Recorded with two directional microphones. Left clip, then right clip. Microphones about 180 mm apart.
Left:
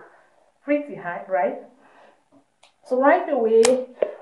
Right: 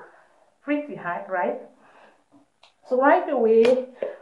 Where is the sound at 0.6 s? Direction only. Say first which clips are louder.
Left 3 dB; 10° left (ahead or behind).